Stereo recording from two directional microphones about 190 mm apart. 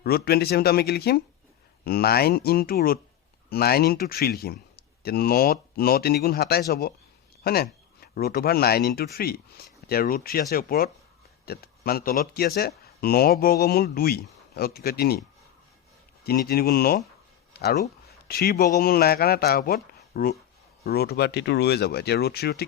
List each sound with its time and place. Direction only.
0.0 s speech: 55° left (ahead or behind)
16.2 s speech: 55° left (ahead or behind)
17.5 s a sound: 55° left (ahead or behind)
18.3 s speech: 55° left (ahead or behind)